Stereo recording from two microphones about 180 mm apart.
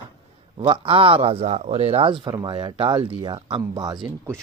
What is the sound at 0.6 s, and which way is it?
A man's voice, 25° right (ahead or behind).